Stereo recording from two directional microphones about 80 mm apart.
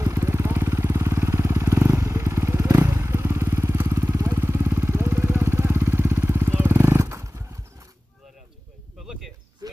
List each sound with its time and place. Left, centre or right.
0.0 s vehicle: right
9.0 s cricket: centre